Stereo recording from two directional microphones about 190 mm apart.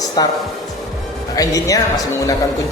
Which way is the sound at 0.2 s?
20° left (ahead or behind).